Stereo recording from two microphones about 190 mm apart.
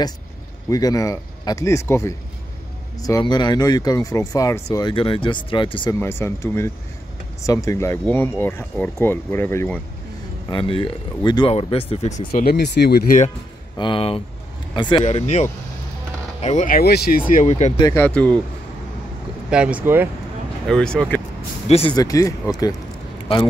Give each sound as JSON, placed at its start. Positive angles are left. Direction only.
{"t": 0.7, "sound": "speech", "side_deg": 20}
{"t": 5.9, "sound": "speech", "side_deg": 15}
{"t": 10.5, "sound": "speech", "side_deg": 25}
{"t": 12.3, "sound": "speech", "side_deg": 50}
{"t": 13.7, "sound": "speech", "side_deg": 25}
{"t": 15.0, "sound": "speech", "side_deg": 35}
{"t": 17.3, "sound": "speech", "side_deg": 40}
{"t": 17.7, "sound": "speech", "side_deg": 20}
{"t": 18.0, "sound": "speech", "side_deg": 5}
{"t": 19.5, "sound": "speech", "side_deg": -5}
{"t": 20.6, "sound": "speech", "side_deg": 5}
{"t": 21.6, "sound": "speech", "side_deg": 35}
{"t": 21.9, "sound": "speech", "side_deg": 20}